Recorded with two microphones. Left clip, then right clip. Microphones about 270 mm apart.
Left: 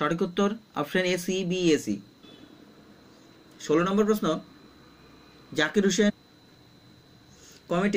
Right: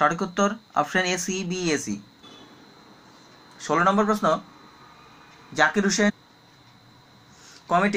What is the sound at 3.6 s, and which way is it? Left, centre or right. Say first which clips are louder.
Speech: right 3 dB; centre.